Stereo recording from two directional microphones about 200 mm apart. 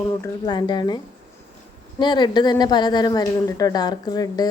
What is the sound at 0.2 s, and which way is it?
A woman's voice, 20° left (ahead or behind).